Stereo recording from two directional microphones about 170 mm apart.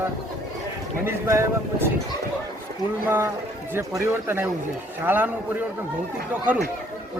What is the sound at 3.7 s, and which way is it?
Speech, 15° right (ahead or behind).